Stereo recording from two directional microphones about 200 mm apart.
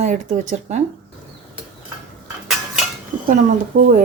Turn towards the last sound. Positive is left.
turn(degrees=-45)  # may be behind; listen again after turning